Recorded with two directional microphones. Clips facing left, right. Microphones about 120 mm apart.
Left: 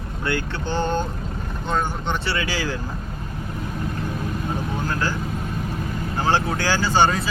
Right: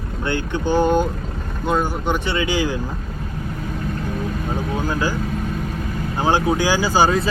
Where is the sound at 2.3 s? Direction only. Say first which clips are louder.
Right 5 dB; 20° right (ahead or behind).